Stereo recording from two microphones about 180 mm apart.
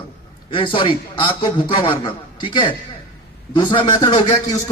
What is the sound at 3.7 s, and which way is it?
Speech, 25° left (ahead or behind).